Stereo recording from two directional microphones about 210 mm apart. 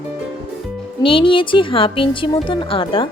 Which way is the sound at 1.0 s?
25° left (ahead or behind).